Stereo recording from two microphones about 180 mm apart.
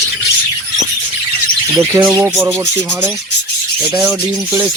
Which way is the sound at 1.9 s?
20° right (ahead or behind).